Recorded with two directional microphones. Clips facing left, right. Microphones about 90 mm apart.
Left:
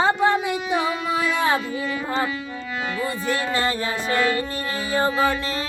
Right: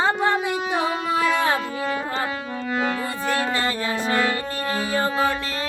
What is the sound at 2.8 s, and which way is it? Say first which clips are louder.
Speech: right 1 dB; 45° right (ahead or behind).